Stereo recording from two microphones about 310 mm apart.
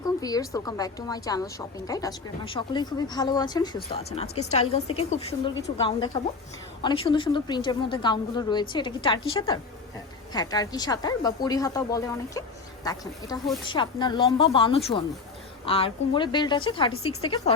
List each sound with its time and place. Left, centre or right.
0.2 s a woman's voice: centre
10.3 s a woman's voice: centre
16.9 s a woman's voice: left
17.2 s a woman's voice: centre